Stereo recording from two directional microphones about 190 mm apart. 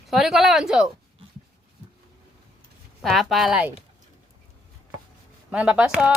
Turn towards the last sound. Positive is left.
turn(degrees=-5)  # may be behind; listen again after turning